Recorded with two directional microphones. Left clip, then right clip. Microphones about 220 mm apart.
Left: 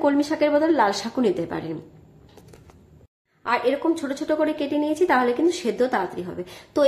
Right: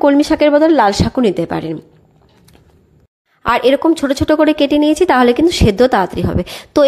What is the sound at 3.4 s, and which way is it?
A woman's voice, 45° right (ahead or behind).